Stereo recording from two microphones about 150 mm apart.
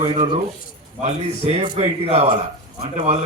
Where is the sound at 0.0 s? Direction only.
35° right (ahead or behind).